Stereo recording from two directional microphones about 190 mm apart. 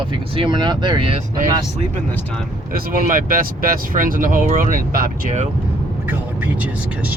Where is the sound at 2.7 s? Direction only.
50° right (ahead or behind).